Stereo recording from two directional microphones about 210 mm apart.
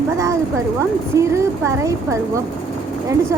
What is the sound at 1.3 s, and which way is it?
Speech, 15° right (ahead or behind).